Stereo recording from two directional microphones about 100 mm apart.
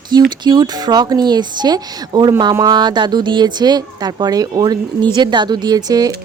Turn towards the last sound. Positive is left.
turn(degrees=-40)  # may be behind; listen again after turning